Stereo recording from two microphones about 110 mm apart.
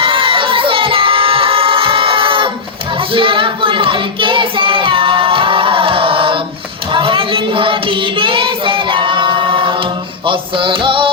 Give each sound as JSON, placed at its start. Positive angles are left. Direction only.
{"t": 0.0, "sound": "crowd", "side_deg": -50}
{"t": 3.1, "sound": "child singing", "side_deg": -50}
{"t": 10.2, "sound": "music", "side_deg": -50}